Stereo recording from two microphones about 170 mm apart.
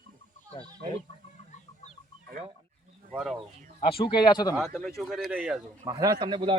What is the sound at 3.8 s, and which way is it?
Speech, 30° left (ahead or behind).